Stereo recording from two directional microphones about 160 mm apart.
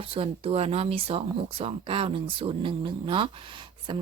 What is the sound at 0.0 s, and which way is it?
Speech, 35° right (ahead or behind).